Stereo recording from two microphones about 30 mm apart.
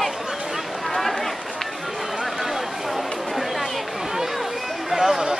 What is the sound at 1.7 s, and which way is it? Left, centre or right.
Run, centre.